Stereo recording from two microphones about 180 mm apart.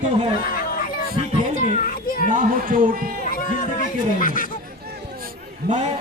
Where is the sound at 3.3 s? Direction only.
50° left (ahead or behind).